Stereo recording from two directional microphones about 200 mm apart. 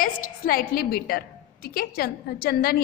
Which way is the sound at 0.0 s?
45° left (ahead or behind).